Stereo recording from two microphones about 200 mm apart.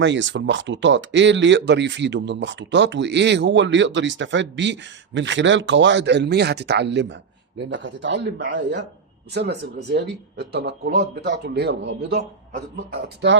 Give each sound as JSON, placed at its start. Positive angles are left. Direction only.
{"t": 0.0, "sound": "speech", "side_deg": -65}